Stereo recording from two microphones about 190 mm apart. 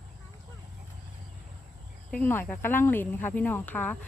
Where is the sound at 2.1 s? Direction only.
5° left (ahead or behind).